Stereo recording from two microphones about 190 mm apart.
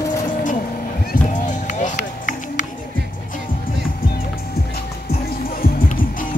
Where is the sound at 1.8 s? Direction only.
40° left (ahead or behind).